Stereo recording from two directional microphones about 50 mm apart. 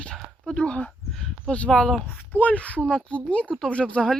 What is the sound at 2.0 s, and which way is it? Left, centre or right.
Speech, left.